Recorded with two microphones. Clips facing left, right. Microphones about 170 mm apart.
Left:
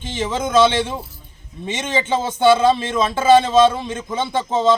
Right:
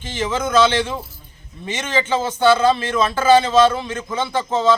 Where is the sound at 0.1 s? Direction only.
20° left (ahead or behind).